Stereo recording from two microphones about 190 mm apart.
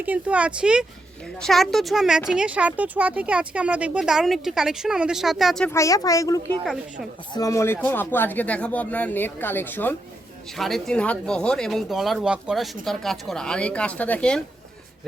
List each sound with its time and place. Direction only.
0.0 s speech: 10° right (ahead or behind)
5.7 s speech: 15° left (ahead or behind)